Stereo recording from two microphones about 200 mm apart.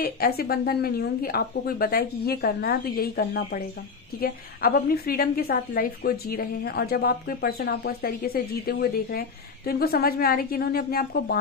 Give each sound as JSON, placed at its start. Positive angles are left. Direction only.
{"t": 0.0, "sound": "a woman's voice", "side_deg": 50}